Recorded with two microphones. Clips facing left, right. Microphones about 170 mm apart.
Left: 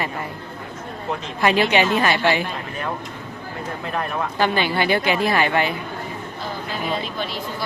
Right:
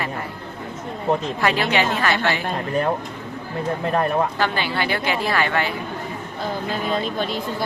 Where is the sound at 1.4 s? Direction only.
20° left (ahead or behind).